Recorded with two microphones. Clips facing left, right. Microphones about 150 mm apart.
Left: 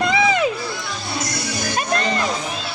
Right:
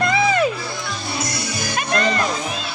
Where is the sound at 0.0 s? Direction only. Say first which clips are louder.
Even; 15° left (ahead or behind).